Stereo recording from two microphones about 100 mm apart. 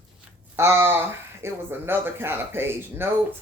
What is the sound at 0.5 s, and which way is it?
Speech, 25° right (ahead or behind).